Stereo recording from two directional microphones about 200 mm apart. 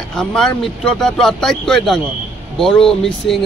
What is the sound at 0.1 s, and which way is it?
A man's voice, 5° left (ahead or behind).